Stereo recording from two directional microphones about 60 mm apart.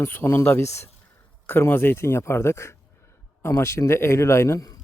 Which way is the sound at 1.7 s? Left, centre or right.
Left.